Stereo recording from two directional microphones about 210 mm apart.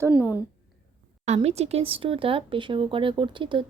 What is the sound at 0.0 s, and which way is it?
Speech, 5° right (ahead or behind).